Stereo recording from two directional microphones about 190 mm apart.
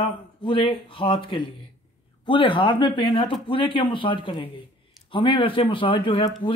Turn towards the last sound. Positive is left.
turn(degrees=25)  # may be behind; listen again after turning